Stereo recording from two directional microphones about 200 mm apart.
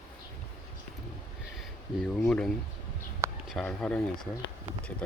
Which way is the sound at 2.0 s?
5° left (ahead or behind).